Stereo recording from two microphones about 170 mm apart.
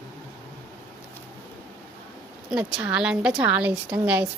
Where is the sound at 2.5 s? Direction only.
5° right (ahead or behind).